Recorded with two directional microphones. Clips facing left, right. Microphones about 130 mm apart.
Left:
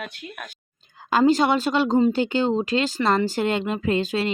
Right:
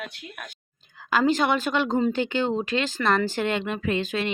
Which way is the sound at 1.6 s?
30° left (ahead or behind).